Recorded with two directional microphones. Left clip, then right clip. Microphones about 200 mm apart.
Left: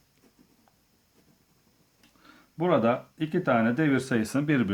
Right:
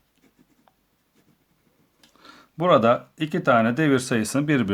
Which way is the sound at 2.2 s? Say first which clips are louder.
Right 7 dB; 35° right (ahead or behind).